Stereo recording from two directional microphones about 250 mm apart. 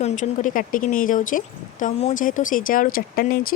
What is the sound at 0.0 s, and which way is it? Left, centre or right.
Speech, left.